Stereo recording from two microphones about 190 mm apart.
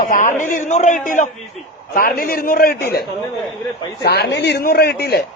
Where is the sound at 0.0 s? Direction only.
40° left (ahead or behind).